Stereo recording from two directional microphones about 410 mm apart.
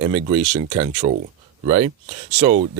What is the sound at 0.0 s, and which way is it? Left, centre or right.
Speech, centre.